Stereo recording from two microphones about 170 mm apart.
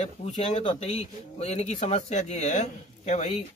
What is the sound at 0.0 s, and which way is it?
A man's voice, 40° left (ahead or behind).